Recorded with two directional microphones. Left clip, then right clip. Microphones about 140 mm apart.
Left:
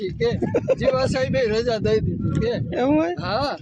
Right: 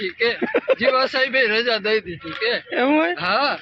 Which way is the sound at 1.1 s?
35° left (ahead or behind).